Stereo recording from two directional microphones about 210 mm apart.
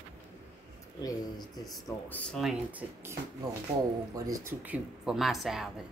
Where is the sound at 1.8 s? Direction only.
10° left (ahead or behind); by 3.1 s 5° right (ahead or behind).